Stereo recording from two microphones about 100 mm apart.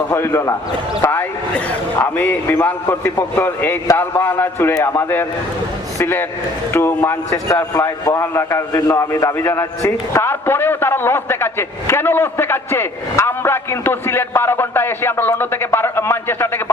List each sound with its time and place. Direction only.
0.1 s a man's voice: 25° left (ahead or behind)
2.0 s a man's voice: 20° left (ahead or behind)